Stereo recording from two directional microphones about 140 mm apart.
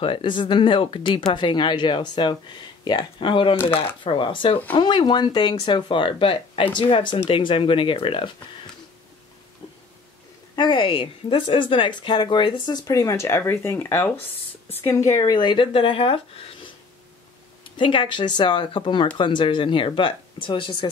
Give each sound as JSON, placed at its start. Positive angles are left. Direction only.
{"t": 0.0, "sound": "speech", "side_deg": 40}
{"t": 10.5, "sound": "speech", "side_deg": 35}
{"t": 17.7, "sound": "speech", "side_deg": 35}